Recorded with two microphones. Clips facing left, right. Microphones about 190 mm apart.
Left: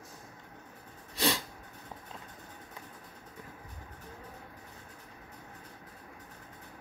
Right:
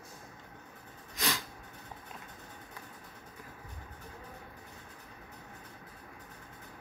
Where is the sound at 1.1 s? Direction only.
30° left (ahead or behind).